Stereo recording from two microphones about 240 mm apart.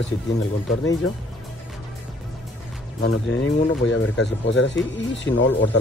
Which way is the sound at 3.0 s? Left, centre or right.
Left.